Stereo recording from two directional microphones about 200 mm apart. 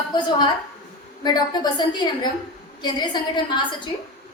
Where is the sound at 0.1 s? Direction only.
20° left (ahead or behind).